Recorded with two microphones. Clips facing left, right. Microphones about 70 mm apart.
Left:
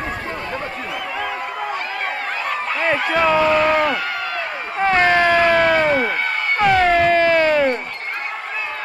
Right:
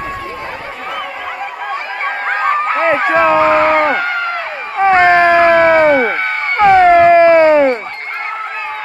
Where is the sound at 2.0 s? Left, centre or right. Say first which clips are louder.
Right 8 dB; right.